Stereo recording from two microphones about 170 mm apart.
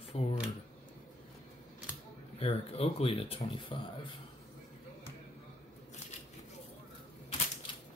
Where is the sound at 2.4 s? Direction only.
35° left (ahead or behind).